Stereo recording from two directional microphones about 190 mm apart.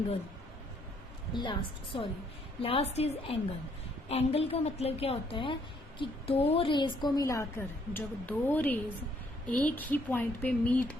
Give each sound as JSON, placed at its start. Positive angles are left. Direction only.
{"t": 1.3, "sound": "a woman's voice", "side_deg": 25}